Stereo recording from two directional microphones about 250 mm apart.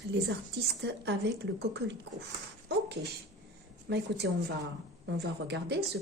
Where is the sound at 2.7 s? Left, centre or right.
Right.